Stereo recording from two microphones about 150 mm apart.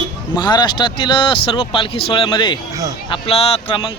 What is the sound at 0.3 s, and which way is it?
Speech, 30° left (ahead or behind).